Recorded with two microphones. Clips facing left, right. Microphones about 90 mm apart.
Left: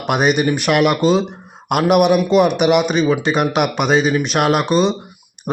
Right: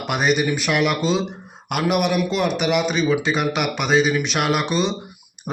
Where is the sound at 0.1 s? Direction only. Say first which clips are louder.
Left 4 dB; 55° left (ahead or behind).